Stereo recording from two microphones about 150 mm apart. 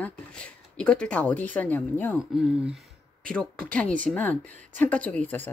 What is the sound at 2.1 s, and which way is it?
Speech, 5° right (ahead or behind).